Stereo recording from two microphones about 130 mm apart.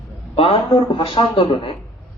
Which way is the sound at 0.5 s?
40° left (ahead or behind).